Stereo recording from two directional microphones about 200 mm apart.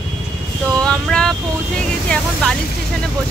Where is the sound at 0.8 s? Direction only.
5° left (ahead or behind).